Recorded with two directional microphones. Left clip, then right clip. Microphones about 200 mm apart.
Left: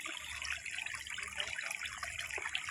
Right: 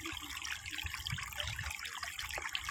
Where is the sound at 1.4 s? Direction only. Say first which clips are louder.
Left 2 dB; 35° right (ahead or behind).